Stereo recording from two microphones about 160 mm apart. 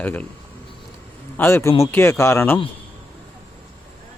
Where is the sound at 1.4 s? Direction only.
15° left (ahead or behind).